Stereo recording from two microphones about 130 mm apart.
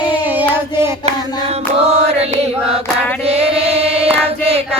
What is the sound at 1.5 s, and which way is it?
Chant, 55° right (ahead or behind).